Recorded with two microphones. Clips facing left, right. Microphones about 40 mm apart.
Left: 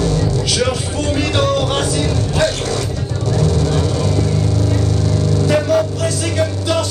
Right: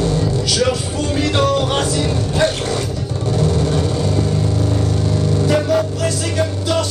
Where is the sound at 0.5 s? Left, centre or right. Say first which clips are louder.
Even; centre.